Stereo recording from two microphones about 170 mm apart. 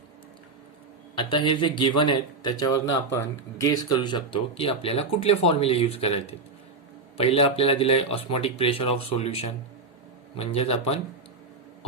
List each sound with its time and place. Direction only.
1.3 s speech: 30° left (ahead or behind)